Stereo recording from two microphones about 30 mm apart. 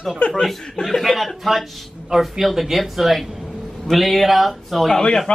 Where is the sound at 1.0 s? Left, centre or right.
Centre.